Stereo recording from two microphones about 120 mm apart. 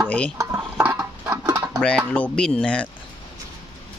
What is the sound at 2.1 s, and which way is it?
Speech, 10° left (ahead or behind).